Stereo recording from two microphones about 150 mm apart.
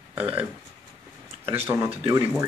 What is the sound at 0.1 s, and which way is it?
Speech, 10° right (ahead or behind).